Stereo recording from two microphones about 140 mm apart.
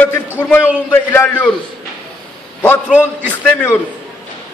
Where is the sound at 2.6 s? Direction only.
10° left (ahead or behind).